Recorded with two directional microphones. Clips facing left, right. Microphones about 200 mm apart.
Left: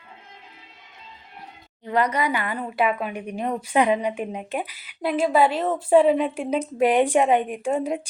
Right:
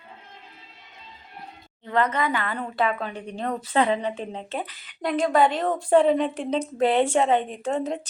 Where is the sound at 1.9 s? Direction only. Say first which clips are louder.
Left 1 dB; 10° left (ahead or behind).